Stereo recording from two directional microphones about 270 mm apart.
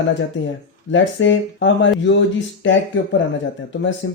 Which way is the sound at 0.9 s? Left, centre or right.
Left.